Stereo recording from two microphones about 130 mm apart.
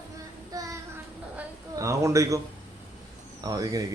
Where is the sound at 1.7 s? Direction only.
25° right (ahead or behind).